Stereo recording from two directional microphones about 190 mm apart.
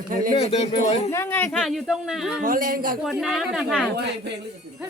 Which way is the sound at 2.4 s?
45° right (ahead or behind).